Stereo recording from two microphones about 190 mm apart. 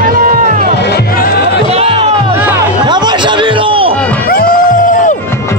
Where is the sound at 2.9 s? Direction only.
25° right (ahead or behind).